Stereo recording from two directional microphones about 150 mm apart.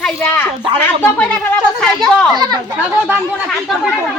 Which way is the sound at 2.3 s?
25° right (ahead or behind).